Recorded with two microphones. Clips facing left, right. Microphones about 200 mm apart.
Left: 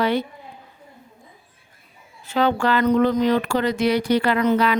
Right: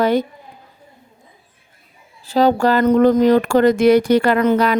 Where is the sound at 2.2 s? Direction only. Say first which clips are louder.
Right 5 dB; 35° right (ahead or behind).